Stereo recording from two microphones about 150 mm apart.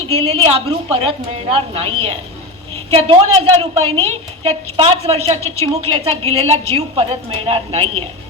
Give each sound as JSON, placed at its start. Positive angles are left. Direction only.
{"t": 0.1, "sound": "a woman's voice", "side_deg": -40}